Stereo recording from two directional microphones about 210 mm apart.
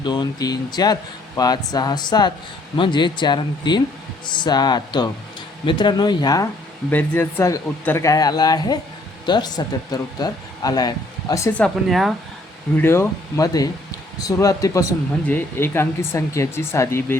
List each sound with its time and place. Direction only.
0.0 s speech: 20° left (ahead or behind); by 12.1 s centre (ahead or behind)
12.7 s speech: 10° left (ahead or behind)